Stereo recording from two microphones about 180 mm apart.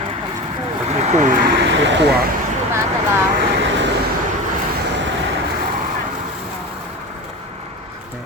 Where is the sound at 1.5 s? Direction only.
85° right.